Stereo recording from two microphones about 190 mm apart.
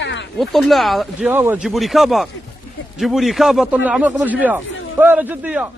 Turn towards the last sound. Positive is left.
turn(degrees=-5)  # may be behind; listen again after turning